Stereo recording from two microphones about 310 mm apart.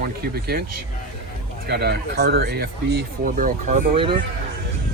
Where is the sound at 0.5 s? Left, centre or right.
Right.